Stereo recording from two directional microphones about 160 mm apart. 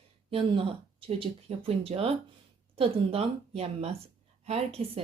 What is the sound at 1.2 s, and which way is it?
Speech, 35° right (ahead or behind).